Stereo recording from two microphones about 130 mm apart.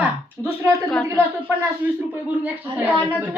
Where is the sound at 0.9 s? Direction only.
5° left (ahead or behind).